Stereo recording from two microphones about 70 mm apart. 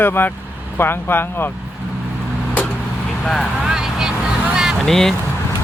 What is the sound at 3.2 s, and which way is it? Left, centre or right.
Speech, centre.